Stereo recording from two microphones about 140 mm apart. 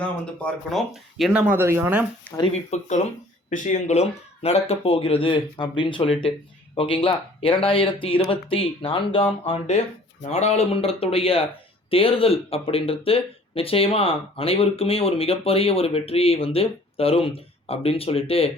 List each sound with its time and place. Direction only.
0.0 s speech: 5° left (ahead or behind); by 2.0 s 15° right (ahead or behind)
2.6 s speech: 55° left (ahead or behind)